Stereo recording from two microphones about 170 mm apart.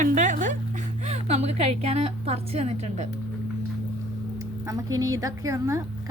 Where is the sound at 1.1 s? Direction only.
40° right (ahead or behind).